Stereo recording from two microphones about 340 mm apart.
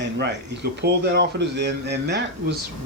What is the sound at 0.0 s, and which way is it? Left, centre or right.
Speech, right.